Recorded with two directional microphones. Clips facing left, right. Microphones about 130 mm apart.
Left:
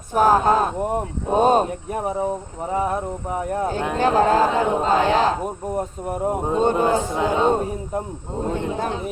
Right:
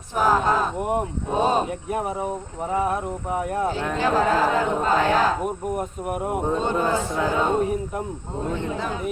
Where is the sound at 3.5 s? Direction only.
45° left (ahead or behind).